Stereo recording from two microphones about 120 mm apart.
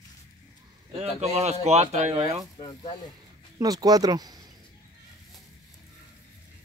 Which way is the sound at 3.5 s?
30° right (ahead or behind).